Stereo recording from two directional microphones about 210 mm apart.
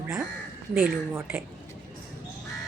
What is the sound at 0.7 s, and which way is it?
Speech, 10° right (ahead or behind).